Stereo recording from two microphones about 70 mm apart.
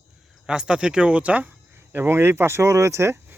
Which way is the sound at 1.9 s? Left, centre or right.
Right.